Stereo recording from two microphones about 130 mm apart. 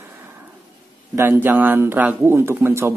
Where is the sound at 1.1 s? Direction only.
15° right (ahead or behind).